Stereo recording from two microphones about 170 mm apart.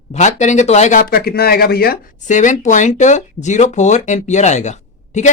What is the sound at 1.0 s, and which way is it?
Speech, 65° left (ahead or behind).